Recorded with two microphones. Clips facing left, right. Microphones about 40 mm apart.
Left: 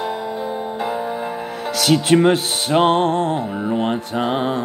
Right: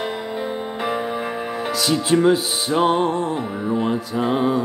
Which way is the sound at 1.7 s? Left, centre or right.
Left.